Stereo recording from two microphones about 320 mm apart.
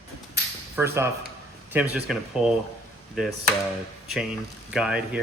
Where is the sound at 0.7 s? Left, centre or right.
Centre.